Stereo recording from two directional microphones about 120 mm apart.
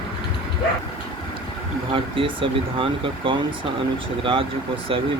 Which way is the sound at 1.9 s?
45° right (ahead or behind).